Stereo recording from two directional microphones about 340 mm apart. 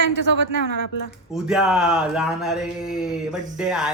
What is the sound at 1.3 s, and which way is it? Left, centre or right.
Speech, centre.